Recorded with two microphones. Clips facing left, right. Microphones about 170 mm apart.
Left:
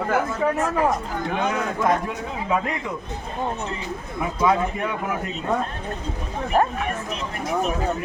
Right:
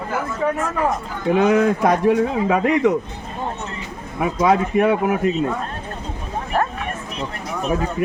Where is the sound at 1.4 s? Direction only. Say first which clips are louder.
Right 6 dB; 75° right (ahead or behind).